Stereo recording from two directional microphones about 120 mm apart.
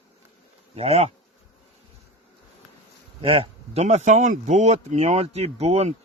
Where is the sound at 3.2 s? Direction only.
50° right (ahead or behind).